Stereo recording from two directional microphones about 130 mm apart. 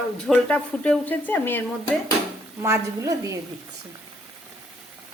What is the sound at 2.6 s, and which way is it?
Speech, 25° right (ahead or behind).